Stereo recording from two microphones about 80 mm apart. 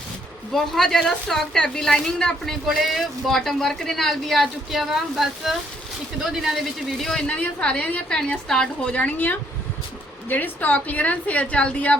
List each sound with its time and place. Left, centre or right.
0.5 s a woman's voice: centre
7.0 s a woman's voice: centre